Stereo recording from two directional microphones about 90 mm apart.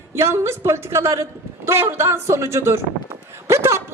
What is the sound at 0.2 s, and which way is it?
A man's voice, 30° right (ahead or behind).